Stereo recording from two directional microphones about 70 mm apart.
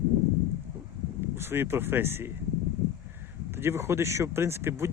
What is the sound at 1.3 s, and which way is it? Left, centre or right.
Speech, right.